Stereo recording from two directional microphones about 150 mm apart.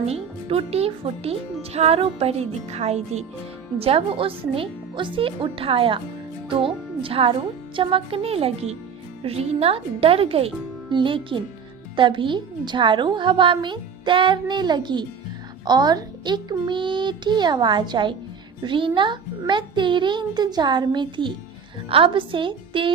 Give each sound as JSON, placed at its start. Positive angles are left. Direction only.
{"t": 0.1, "sound": "a woman's voice", "side_deg": -40}